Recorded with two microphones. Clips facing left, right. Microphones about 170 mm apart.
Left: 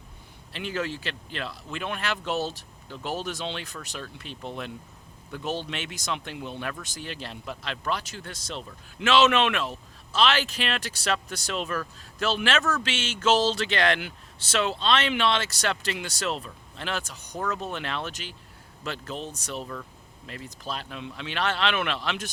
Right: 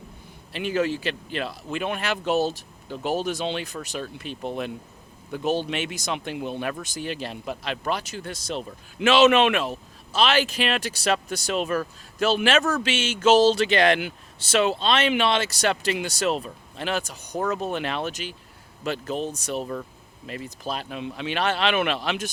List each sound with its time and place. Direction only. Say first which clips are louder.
0.5 s speech: right 7 dB; 10° right (ahead or behind)
17.3 s speech: right 5 dB; 25° right (ahead or behind)
17.7 s speech: right 5 dB; 10° right (ahead or behind)